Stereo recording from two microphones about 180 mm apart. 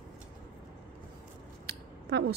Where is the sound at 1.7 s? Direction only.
65° right (ahead or behind).